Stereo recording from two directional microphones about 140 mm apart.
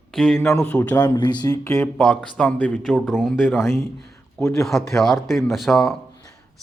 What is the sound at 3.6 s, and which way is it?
Speech, 20° left (ahead or behind).